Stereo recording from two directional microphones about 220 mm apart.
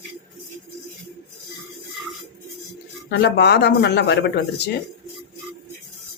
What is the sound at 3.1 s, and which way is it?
Speech, 50° left (ahead or behind).